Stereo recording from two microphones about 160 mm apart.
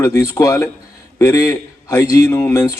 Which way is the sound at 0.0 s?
20° left (ahead or behind).